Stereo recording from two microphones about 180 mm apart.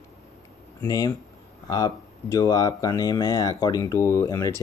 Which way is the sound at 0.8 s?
20° left (ahead or behind).